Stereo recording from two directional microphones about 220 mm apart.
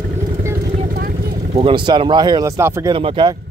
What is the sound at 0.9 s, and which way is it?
Vehicle, 40° right (ahead or behind).